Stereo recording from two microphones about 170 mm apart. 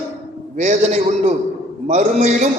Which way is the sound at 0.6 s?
45° right (ahead or behind).